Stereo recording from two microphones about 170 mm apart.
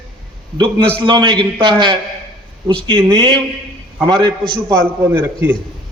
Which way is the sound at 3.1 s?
25° right (ahead or behind).